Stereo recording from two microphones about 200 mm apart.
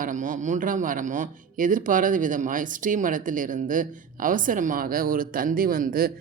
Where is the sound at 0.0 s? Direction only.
40° right (ahead or behind).